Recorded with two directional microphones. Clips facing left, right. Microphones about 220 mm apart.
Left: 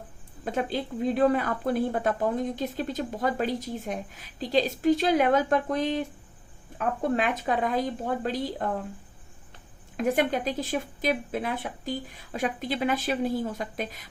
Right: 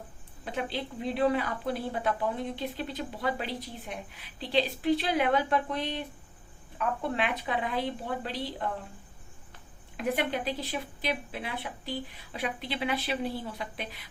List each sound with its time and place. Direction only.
0.4 s speech: 45° left (ahead or behind)
7.2 s speech: 45° left (ahead or behind)
10.0 s speech: 45° left (ahead or behind)